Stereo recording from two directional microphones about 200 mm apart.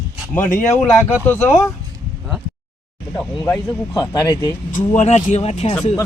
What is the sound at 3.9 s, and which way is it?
Speech, 20° left (ahead or behind).